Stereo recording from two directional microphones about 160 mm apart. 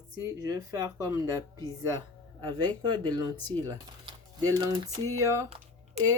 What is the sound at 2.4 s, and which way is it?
Speech, 25° right (ahead or behind).